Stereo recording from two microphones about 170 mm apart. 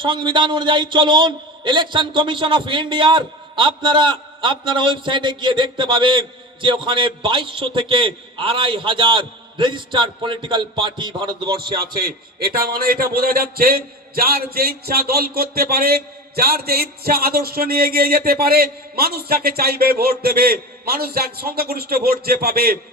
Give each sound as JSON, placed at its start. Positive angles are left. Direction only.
{"t": 0.0, "sound": "a man's voice", "side_deg": -30}
{"t": 11.9, "sound": "a man's voice", "side_deg": -60}